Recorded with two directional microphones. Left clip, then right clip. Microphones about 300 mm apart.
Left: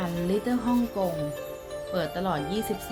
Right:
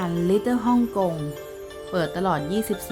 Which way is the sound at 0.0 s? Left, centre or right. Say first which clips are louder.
Right 6 dB; right.